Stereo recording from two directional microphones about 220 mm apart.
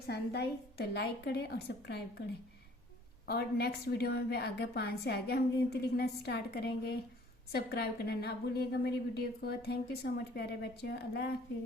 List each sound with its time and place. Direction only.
0.1 s a woman's voice: 50° left (ahead or behind)
3.2 s a woman's voice: 45° left (ahead or behind)